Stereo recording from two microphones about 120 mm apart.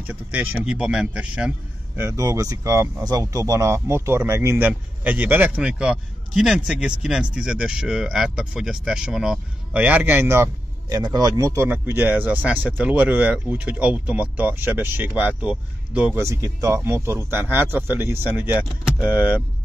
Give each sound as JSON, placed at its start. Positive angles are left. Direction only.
{"t": 0.0, "sound": "speech", "side_deg": -15}
{"t": 2.0, "sound": "speech", "side_deg": -25}
{"t": 11.0, "sound": "speech", "side_deg": -35}
{"t": 16.2, "sound": "speech", "side_deg": -25}